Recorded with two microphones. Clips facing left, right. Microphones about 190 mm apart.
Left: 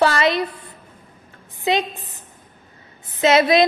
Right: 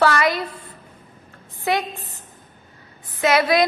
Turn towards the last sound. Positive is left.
turn(degrees=25)  # may be behind; listen again after turning